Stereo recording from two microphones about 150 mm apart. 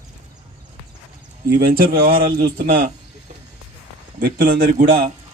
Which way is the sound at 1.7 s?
80° right.